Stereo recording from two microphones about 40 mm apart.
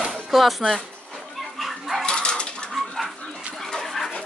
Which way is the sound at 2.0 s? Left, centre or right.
Left.